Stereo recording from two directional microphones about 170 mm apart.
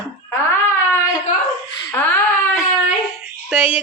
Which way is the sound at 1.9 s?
10° left (ahead or behind).